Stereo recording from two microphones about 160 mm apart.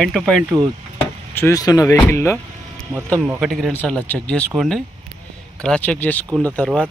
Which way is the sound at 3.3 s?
Centre (ahead or behind).